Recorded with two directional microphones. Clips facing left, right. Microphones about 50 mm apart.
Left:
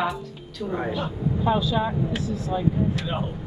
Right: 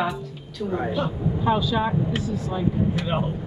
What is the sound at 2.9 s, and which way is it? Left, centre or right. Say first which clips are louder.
Speech: right 3 dB; right.